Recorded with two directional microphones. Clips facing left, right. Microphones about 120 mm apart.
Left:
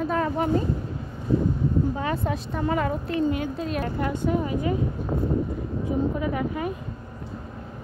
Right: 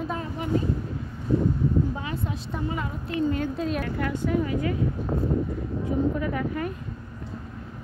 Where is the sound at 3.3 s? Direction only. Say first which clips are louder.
Even; 5° left (ahead or behind).